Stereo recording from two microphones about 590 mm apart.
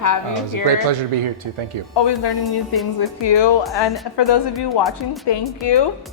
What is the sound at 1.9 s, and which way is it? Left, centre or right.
A woman's voice, left.